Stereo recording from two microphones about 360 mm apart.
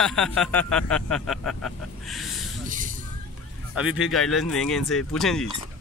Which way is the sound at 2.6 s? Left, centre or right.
Right.